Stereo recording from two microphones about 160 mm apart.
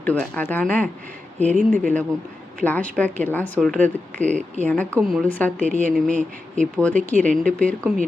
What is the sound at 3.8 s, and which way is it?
Speech, 50° right (ahead or behind).